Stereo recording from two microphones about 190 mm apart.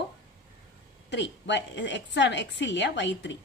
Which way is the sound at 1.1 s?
70° left (ahead or behind).